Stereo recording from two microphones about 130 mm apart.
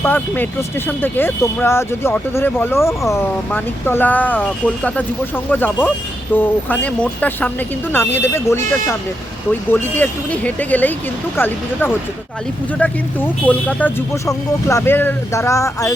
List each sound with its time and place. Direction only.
0.0 s speech: 15° left (ahead or behind)
14.3 s speech: 25° left (ahead or behind)